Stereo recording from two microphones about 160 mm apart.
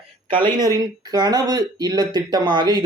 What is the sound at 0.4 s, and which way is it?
Speech, 25° right (ahead or behind).